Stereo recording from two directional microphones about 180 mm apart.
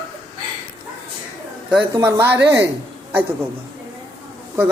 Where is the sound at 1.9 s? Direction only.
15° right (ahead or behind).